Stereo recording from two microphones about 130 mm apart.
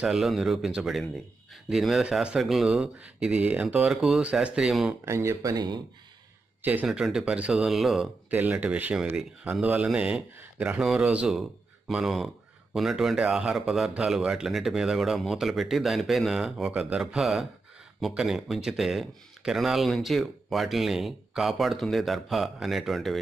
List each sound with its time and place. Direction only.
0.0 s speech: 5° right (ahead or behind)
5.0 s speech: 20° right (ahead or behind)
6.6 s speech: 15° right (ahead or behind)
8.3 s speech: 15° right (ahead or behind)